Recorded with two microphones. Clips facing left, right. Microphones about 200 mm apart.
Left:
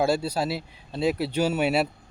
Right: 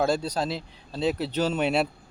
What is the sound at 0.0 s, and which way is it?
Speech, 5° left (ahead or behind).